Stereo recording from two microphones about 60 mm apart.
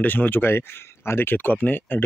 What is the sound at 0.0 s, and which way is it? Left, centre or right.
Speech, left.